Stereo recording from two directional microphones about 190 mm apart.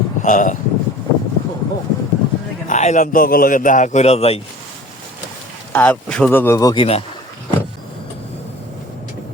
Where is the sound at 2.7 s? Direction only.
40° left (ahead or behind).